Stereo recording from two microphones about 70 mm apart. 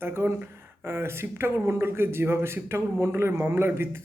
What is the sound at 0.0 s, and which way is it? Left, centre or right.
Speech, right.